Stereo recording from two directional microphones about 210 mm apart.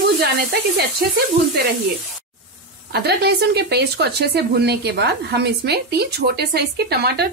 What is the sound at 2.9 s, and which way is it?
Speech, 50° right (ahead or behind).